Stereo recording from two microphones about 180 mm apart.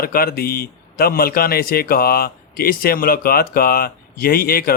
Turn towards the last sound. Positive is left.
turn(degrees=55)  # may be behind; listen again after turning